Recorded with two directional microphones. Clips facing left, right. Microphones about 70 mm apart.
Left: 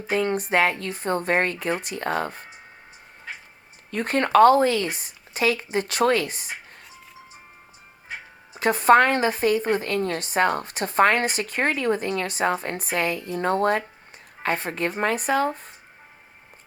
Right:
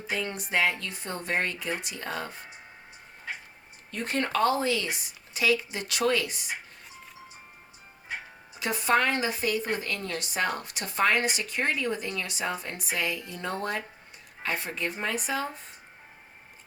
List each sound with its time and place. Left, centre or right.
0.1 s a woman's voice: left
3.9 s a woman's voice: left
8.5 s a woman's voice: left